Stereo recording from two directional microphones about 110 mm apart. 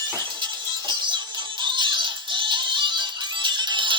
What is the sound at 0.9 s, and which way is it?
Music, 40° right (ahead or behind).